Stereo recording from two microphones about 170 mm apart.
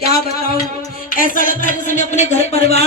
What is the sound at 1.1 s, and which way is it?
Speech, 55° left (ahead or behind).